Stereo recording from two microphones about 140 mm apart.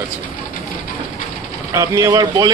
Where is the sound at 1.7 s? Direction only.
25° right (ahead or behind).